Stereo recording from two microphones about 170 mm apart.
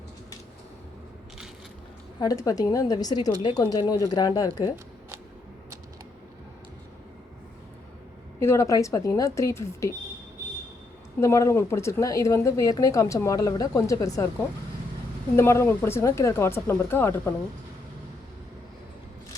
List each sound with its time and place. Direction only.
2.1 s speech: 20° left (ahead or behind)
8.4 s speech: 15° left (ahead or behind)
11.2 s speech: 15° left (ahead or behind)
15.4 s speech: 15° left (ahead or behind)